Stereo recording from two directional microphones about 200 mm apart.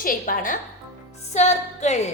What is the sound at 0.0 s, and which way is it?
A woman's voice, 45° left (ahead or behind).